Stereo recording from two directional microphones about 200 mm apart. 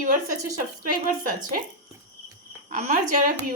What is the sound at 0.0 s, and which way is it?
Speech, 40° right (ahead or behind).